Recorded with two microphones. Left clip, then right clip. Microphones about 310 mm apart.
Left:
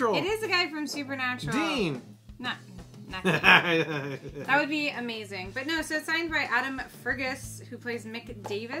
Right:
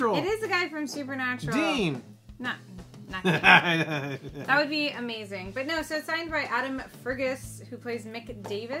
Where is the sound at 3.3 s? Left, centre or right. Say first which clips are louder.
Right 1 dB; right.